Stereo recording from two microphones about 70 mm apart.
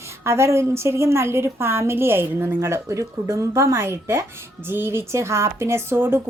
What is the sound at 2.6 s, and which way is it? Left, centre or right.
A woman's voice, right.